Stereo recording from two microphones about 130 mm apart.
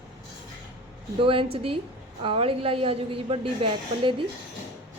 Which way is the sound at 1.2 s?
45° right (ahead or behind).